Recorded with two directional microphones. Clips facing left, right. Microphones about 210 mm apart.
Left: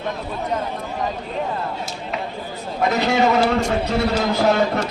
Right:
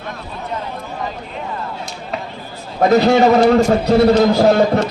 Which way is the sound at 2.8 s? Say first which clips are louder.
Right 7 dB; 40° right (ahead or behind).